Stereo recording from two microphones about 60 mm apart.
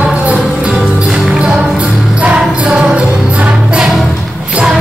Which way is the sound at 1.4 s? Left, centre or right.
Centre.